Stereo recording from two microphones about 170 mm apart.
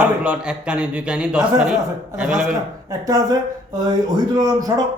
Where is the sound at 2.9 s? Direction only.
20° right (ahead or behind).